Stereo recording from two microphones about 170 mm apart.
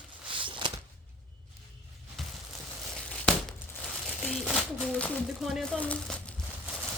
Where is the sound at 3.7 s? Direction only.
5° left (ahead or behind).